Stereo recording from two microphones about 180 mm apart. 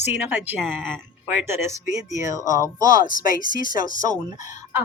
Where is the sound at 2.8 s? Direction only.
50° left (ahead or behind).